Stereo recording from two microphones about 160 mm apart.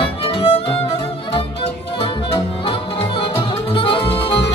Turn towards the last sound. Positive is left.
turn(degrees=35)  # may be behind; listen again after turning